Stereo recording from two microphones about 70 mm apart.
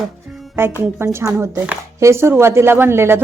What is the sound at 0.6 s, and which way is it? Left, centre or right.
Speech, right.